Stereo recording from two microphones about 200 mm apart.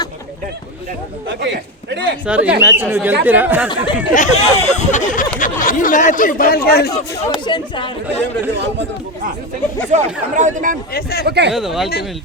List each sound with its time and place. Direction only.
1.4 s a man's voice: 60° right (ahead or behind)
2.2 s speech: 5° right (ahead or behind)
4.1 s speech: 35° left (ahead or behind)
6.9 s speech: 25° left (ahead or behind)
8.2 s a man's voice: 60° right (ahead or behind)
9.9 s speech: 35° right (ahead or behind)
10.9 s speech: 50° left (ahead or behind)
11.3 s a man's voice: 60° right (ahead or behind)
11.5 s speech: centre (ahead or behind)